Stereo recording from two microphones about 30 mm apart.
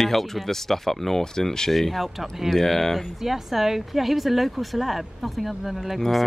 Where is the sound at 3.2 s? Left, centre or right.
Centre.